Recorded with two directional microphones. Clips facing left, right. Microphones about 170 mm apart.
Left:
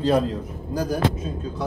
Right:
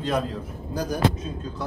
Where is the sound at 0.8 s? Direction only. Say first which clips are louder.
Left 1 dB; 5° left (ahead or behind).